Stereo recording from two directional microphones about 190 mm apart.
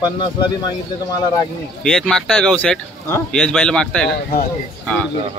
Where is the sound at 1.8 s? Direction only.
5° left (ahead or behind).